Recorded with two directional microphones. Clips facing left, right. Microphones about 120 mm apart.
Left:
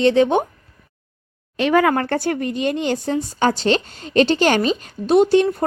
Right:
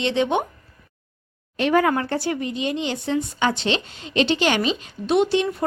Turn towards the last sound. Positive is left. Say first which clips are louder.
# left 5 dB
turn(degrees=45)  # may be behind; listen again after turning